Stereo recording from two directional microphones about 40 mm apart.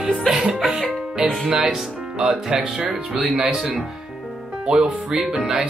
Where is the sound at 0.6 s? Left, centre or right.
Centre.